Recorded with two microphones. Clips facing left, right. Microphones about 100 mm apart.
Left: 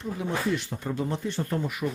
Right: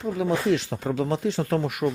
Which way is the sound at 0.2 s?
90° right.